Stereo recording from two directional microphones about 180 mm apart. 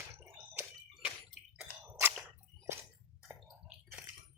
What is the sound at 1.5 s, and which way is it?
Squish, 5° right (ahead or behind).